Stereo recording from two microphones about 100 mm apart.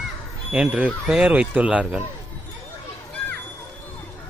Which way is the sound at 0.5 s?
10° right (ahead or behind).